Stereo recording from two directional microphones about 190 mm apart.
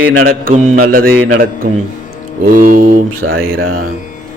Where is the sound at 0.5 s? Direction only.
40° right (ahead or behind).